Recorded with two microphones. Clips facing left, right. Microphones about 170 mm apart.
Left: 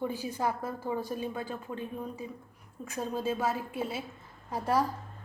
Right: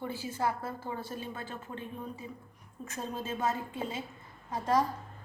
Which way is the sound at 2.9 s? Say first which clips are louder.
Left 5 dB; 10° left (ahead or behind).